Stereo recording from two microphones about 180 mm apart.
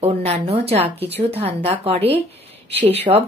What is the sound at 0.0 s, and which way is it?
Speech, 35° right (ahead or behind).